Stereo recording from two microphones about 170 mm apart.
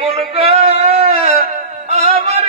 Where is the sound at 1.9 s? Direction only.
35° right (ahead or behind).